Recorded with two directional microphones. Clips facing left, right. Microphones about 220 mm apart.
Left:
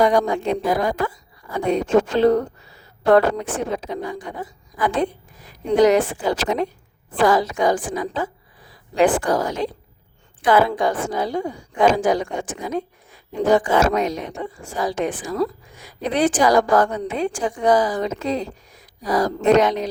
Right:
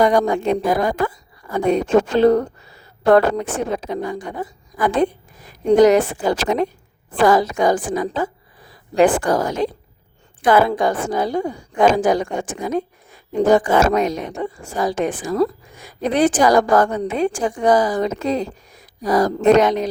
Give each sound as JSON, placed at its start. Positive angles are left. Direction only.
{"t": 0.0, "sound": "a woman's voice", "side_deg": -45}